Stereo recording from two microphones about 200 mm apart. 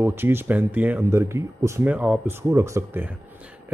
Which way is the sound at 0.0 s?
10° right (ahead or behind).